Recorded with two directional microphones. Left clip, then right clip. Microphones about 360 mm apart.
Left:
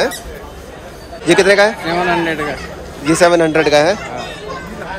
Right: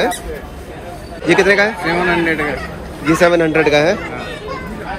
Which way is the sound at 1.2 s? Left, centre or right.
Centre.